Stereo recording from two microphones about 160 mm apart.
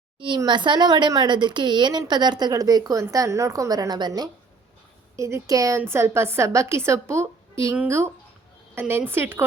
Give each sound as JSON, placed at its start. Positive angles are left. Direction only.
{"t": 0.2, "sound": "speech", "side_deg": -30}